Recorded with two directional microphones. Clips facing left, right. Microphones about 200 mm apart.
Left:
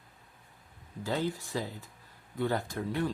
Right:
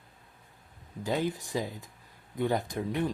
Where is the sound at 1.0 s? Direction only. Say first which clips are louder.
Right 2 dB; 15° right (ahead or behind).